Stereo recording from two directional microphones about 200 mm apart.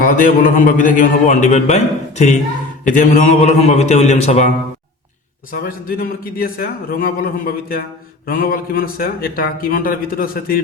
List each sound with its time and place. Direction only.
0.0 s a man's voice: 40° left (ahead or behind)
5.5 s a man's voice: 45° left (ahead or behind)